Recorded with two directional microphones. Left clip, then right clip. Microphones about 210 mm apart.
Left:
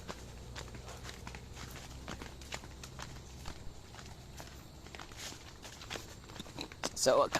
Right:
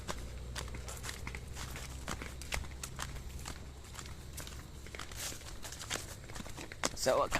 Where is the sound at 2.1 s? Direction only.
50° right (ahead or behind).